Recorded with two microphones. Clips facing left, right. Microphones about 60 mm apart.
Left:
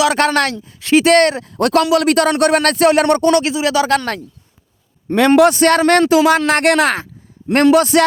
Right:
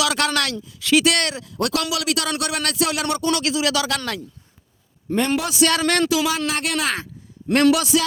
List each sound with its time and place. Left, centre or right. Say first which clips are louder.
0.0 s speech: left 7 dB; left
3.2 s speech: left 7 dB; left
5.0 s a man's voice: left 8 dB; left
5.3 s speech: left 12 dB; left
7.5 s speech: left 6 dB; left